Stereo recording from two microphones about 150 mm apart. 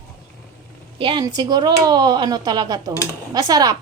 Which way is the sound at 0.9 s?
35° right (ahead or behind).